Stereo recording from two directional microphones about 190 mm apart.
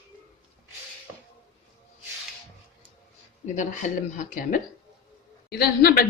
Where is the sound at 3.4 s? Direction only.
40° left (ahead or behind).